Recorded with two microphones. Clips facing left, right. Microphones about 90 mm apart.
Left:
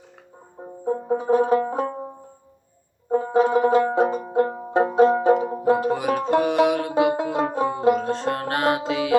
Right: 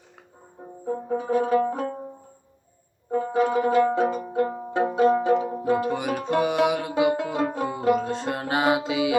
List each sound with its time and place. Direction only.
0.9 s music: 30° left (ahead or behind)
1.5 s banjo: 20° left (ahead or behind)
3.1 s banjo: 30° left (ahead or behind)
4.0 s music: 35° left (ahead or behind)
4.9 s banjo: 30° left (ahead or behind)
5.9 s music: centre (ahead or behind)